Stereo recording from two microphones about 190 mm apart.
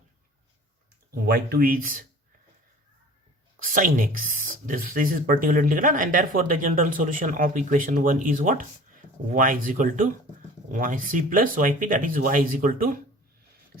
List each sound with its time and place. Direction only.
1.1 s speech: 55° right (ahead or behind)
3.6 s speech: 45° right (ahead or behind)